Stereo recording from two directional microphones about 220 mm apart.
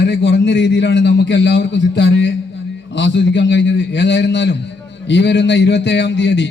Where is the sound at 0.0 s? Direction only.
50° left (ahead or behind).